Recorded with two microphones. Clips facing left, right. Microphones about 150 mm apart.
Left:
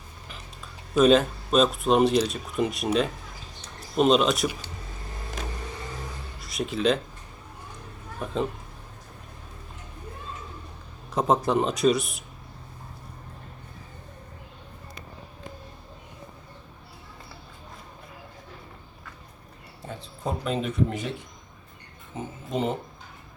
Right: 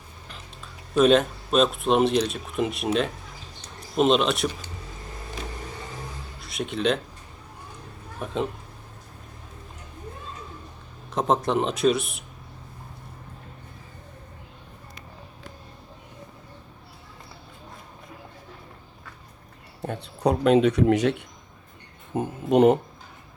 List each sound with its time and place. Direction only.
0.9 s speech: centre (ahead or behind)
6.4 s speech: centre (ahead or behind)
8.2 s speech: centre (ahead or behind)
11.1 s speech: centre (ahead or behind)
19.8 s speech: 65° right (ahead or behind)
22.1 s speech: 65° right (ahead or behind)